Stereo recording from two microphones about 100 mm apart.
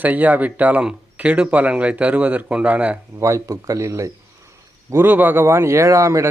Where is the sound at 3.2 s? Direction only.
30° right (ahead or behind).